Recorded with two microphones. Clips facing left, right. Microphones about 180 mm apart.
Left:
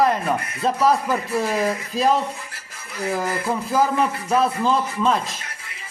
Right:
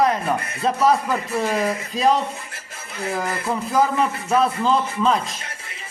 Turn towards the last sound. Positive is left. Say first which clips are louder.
# right 1 dB
turn(degrees=5)  # may be behind; listen again after turning